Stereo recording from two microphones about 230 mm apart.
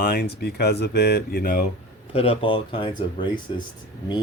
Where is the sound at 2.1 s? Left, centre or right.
Left.